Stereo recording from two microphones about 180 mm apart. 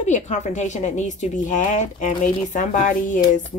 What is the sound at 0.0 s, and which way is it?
Speech, 40° left (ahead or behind).